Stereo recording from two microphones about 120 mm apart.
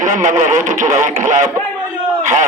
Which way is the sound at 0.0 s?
90° right.